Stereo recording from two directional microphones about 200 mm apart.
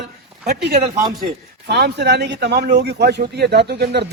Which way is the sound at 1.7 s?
55° right (ahead or behind).